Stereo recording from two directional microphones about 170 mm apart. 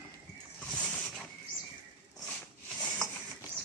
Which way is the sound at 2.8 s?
5° left (ahead or behind).